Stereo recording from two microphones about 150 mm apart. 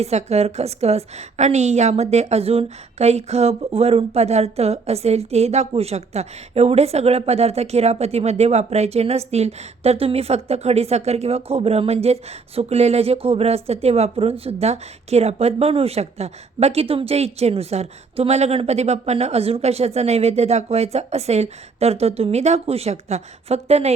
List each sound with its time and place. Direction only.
0.0 s a woman's voice: 45° right (ahead or behind)